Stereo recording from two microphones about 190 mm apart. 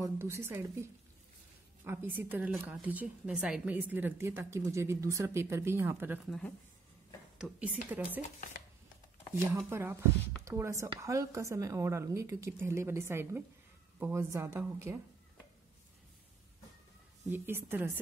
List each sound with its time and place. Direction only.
0.0 s a woman's voice: 15° right (ahead or behind)
1.9 s a woman's voice: 10° right (ahead or behind)
7.3 s a woman's voice: 5° right (ahead or behind)
9.7 s a woman's voice: 15° right (ahead or behind)
17.3 s a woman's voice: 10° right (ahead or behind)